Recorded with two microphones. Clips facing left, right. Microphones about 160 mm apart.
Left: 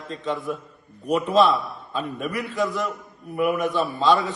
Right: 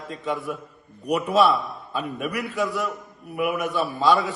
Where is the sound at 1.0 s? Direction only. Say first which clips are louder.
Left 1 dB; 15° right (ahead or behind).